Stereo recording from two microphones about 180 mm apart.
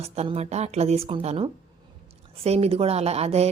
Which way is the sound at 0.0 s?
35° right (ahead or behind).